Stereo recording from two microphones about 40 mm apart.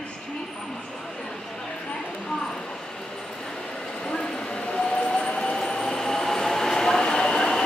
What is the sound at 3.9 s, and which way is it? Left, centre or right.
Train, left.